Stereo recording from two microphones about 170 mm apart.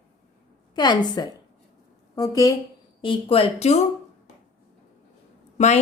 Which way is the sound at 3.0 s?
30° left (ahead or behind).